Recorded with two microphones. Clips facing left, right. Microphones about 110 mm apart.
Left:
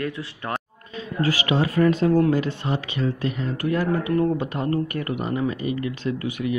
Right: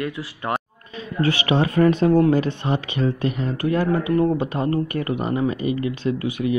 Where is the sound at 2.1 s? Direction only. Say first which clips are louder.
Right 3 dB; 20° right (ahead or behind).